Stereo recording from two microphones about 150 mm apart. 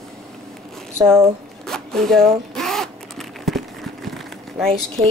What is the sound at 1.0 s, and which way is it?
Speech, 15° right (ahead or behind).